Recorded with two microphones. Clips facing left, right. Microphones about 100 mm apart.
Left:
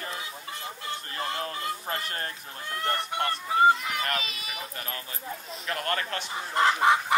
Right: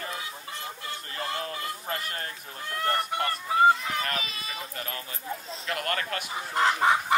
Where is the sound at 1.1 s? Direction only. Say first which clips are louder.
Even; 35° left (ahead or behind).